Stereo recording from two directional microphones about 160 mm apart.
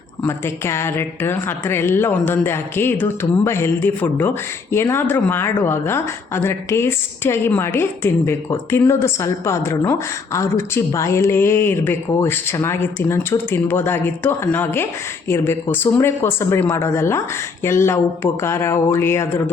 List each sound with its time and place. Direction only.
0.2 s a woman's voice: 15° left (ahead or behind)